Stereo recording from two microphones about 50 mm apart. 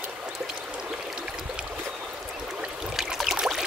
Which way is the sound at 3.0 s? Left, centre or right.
Centre.